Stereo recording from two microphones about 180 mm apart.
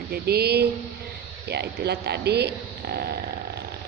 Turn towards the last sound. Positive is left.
turn(degrees=-60)  # may be behind; listen again after turning